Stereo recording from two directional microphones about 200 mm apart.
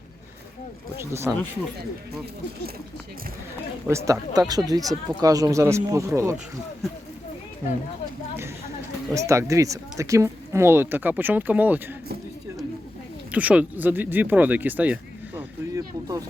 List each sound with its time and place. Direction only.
1.1 s speech: 15° right (ahead or behind)
3.8 s speech: 15° right (ahead or behind)
9.1 s speech: 15° right (ahead or behind)
13.3 s speech: 5° right (ahead or behind)
15.4 s a sound: 15° right (ahead or behind)